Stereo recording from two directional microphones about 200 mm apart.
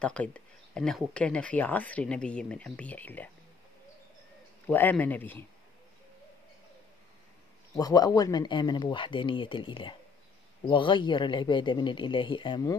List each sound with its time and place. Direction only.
0.0 s speech: 5° left (ahead or behind)
4.6 s speech: 10° left (ahead or behind)
7.7 s speech: 20° left (ahead or behind)